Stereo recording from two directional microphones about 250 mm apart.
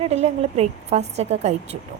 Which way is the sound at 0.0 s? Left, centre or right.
Right.